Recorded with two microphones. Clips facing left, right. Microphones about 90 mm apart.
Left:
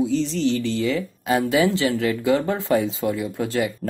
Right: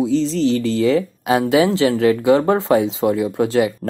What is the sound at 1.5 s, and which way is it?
Speech, 25° right (ahead or behind).